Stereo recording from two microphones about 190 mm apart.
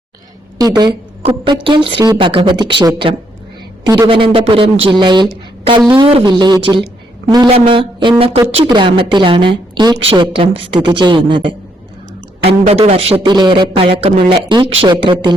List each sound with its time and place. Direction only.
0.6 s speech: 20° right (ahead or behind)